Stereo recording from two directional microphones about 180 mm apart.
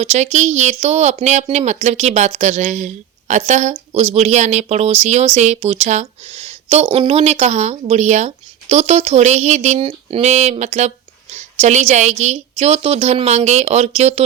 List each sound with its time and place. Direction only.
0.0 s speech: 35° right (ahead or behind)